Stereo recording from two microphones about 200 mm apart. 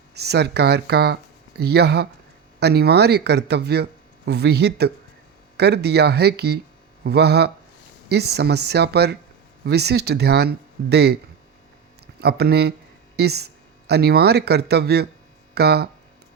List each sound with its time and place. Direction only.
0.1 s speech: 55° right (ahead or behind)
12.2 s speech: 55° right (ahead or behind)